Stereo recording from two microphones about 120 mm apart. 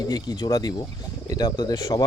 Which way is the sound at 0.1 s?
35° left (ahead or behind).